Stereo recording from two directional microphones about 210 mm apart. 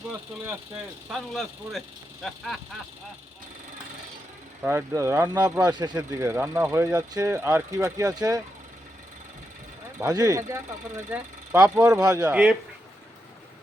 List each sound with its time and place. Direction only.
0.1 s speech: 5° right (ahead or behind)
4.6 s speech: 10° right (ahead or behind)
10.0 s speech: 15° right (ahead or behind)